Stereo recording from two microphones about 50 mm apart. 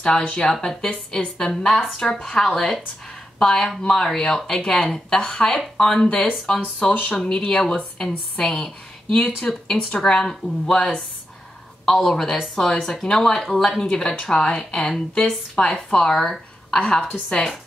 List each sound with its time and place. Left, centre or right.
0.0 s speech: centre
6.6 s speech: left
7.2 s a woman's voice: centre
15.5 s speech: left
15.9 s speech: centre